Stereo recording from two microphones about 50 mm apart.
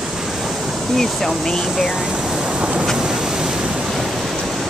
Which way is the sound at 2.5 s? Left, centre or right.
Right.